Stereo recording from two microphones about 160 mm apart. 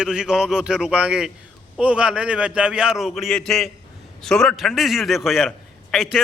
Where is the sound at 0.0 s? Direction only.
5° right (ahead or behind).